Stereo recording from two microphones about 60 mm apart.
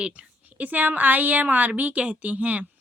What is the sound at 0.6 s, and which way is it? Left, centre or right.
Speech, right.